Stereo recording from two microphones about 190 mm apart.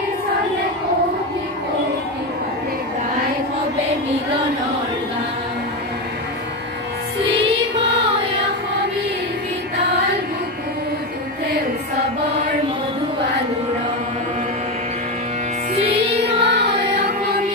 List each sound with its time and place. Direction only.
16.2 s music: 60° right (ahead or behind)